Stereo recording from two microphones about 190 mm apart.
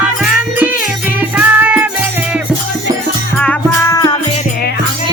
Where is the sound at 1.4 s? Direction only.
5° right (ahead or behind).